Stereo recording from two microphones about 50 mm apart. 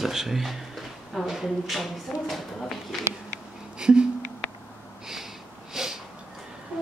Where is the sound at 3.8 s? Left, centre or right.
Centre.